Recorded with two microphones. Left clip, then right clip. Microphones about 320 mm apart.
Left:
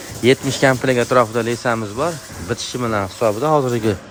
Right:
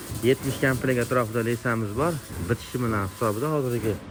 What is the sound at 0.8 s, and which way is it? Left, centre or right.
Speech, centre.